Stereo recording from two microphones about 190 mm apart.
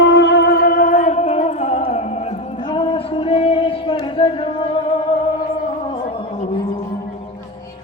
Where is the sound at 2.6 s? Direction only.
25° left (ahead or behind).